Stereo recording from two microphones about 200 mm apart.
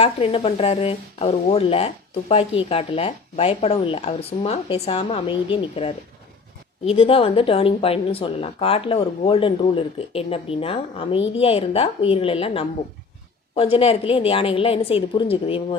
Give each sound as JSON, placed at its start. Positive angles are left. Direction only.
{"t": 0.0, "sound": "speech", "side_deg": 30}